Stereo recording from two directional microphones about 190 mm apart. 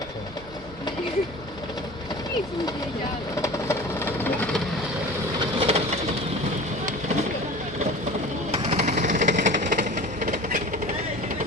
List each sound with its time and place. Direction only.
3.4 s sewing machine: 15° left (ahead or behind)
5.5 s bird: 30° right (ahead or behind)
8.5 s jackhammer: 30° right (ahead or behind)